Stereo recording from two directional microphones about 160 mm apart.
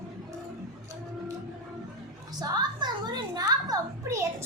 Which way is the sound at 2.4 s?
25° right (ahead or behind).